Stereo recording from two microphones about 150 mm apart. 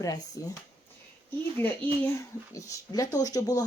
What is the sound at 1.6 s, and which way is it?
Speech, 15° left (ahead or behind).